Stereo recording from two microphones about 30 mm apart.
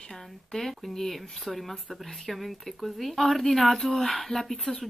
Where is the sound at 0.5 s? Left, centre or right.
Centre.